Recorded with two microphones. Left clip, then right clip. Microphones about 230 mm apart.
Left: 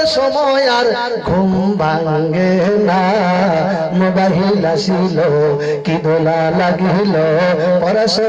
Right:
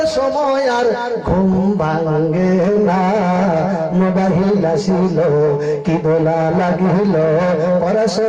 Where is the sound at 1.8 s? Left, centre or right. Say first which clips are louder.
Left 3 dB; left.